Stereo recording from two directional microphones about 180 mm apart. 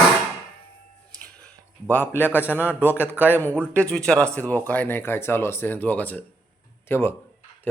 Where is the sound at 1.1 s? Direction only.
5° left (ahead or behind).